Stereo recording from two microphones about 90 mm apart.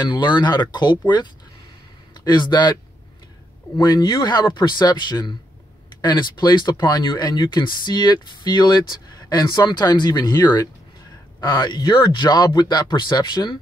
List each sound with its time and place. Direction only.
0.0 s speech: 55° left (ahead or behind)
3.7 s speech: 55° left (ahead or behind)